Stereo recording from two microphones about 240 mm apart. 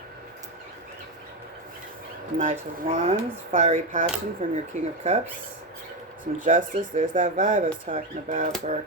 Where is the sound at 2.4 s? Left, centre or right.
Right.